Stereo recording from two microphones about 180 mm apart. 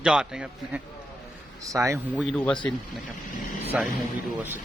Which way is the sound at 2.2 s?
Centre (ahead or behind).